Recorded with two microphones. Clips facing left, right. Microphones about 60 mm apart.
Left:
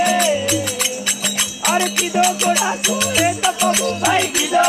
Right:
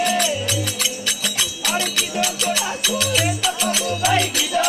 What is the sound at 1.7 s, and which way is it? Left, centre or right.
Music, left.